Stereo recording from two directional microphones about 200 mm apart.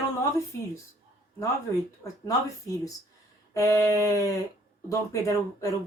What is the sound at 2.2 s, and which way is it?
Speech, 15° left (ahead or behind).